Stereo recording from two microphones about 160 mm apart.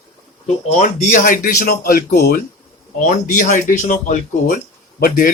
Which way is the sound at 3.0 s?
55° left (ahead or behind).